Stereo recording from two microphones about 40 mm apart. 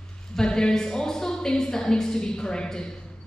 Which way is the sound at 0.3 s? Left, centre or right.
Centre.